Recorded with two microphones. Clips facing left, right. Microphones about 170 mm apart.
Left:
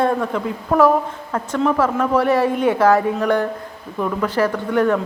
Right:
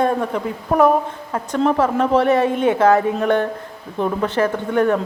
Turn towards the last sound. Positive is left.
turn(degrees=-25)  # may be behind; listen again after turning